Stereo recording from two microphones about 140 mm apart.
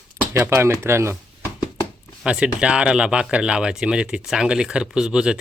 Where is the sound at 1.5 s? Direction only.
30° left (ahead or behind).